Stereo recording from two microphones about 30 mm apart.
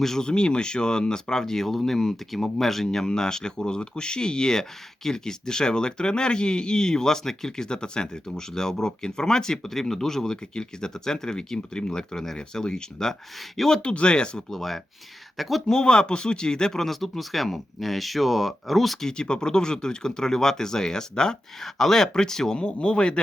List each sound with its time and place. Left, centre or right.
0.0 s speech: centre
0.3 s speech: left
10.5 s speech: left
12.1 s speech: centre
13.8 s speech: left
14.5 s speech: centre
15.6 s speech: left
16.8 s speech: centre
19.1 s speech: left
21.6 s speech: centre
22.6 s speech: left